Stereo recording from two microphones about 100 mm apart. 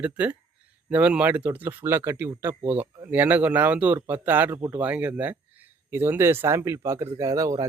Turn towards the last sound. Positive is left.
turn(degrees=-35)  # may be behind; listen again after turning